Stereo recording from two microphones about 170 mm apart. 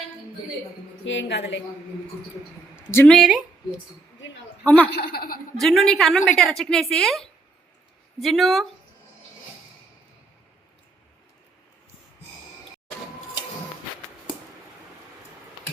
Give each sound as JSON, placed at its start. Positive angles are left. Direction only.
{"t": 1.0, "sound": "a woman's voice", "side_deg": 90}
{"t": 3.1, "sound": "speech", "side_deg": 0}
{"t": 4.6, "sound": "speech", "side_deg": 10}
{"t": 4.9, "sound": "speech", "side_deg": 65}
{"t": 5.5, "sound": "a woman's voice", "side_deg": 0}